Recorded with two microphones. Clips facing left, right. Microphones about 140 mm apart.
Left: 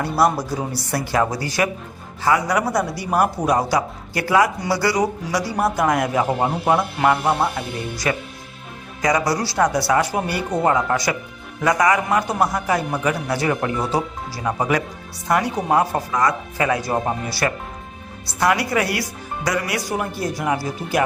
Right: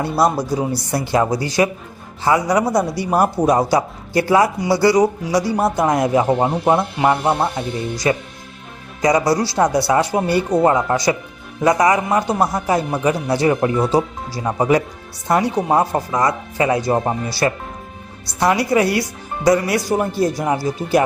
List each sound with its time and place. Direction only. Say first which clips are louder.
0.0 s speech: right 2 dB; 20° right (ahead or behind)